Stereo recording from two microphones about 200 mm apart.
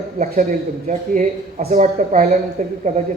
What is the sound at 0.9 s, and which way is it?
A man's voice, 40° right (ahead or behind).